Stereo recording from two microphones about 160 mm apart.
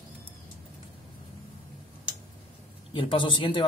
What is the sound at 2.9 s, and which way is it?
Speech, 35° left (ahead or behind).